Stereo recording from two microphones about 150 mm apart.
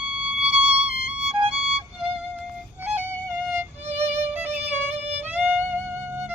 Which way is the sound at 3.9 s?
10° right (ahead or behind).